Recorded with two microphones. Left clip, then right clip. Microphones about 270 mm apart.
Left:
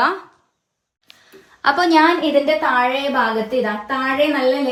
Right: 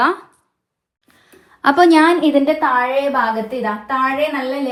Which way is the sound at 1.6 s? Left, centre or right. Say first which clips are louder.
Right 3 dB; right.